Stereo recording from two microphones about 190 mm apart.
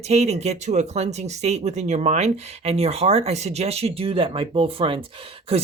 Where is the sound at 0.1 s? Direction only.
35° right (ahead or behind).